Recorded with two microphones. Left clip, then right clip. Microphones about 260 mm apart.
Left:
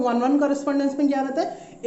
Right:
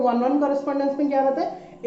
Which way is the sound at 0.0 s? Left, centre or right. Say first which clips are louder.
Even; left.